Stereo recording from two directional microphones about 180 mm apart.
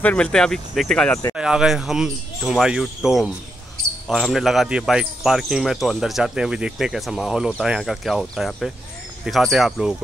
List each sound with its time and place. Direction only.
0.0 s speech: 10° left (ahead or behind)
1.3 s speech: 5° right (ahead or behind)